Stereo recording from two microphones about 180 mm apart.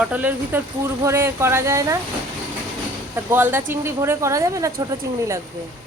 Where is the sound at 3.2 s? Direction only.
15° right (ahead or behind).